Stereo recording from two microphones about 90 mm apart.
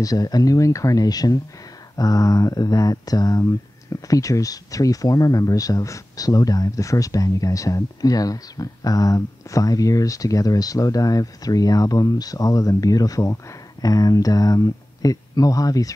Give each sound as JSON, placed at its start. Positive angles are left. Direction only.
{"t": 0.0, "sound": "speech", "side_deg": 45}